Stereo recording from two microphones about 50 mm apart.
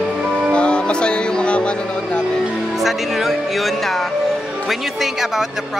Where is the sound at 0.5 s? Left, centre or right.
Left.